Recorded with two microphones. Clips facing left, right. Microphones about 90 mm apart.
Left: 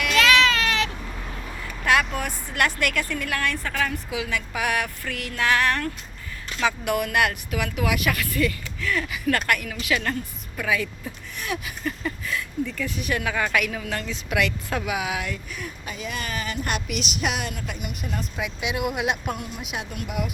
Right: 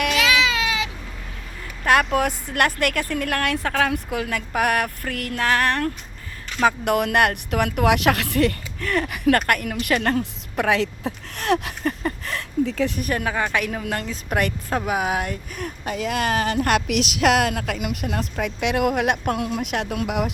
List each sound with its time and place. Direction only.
0.1 s baby cry: 10° right (ahead or behind)
1.8 s speech: 50° right (ahead or behind)
4.1 s speech: 50° right (ahead or behind)
6.6 s speech: 55° right (ahead or behind)
10.2 s a woman's voice: 70° right (ahead or behind)
11.8 s speech: 45° right (ahead or behind)
12.2 s speech: 70° right (ahead or behind)
13.0 s speech: 40° right (ahead or behind); by 18.3 s 80° right
18.3 s speech: 55° right (ahead or behind)
19.4 s speech: 85° right; by 20.3 s 65° right (ahead or behind)